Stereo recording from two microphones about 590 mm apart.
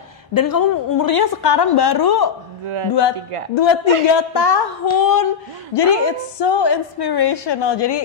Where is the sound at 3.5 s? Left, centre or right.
Left.